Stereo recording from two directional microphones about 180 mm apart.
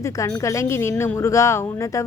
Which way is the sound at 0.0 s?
20° left (ahead or behind).